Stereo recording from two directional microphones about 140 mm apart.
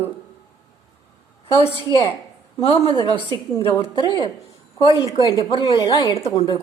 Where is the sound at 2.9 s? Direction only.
35° left (ahead or behind).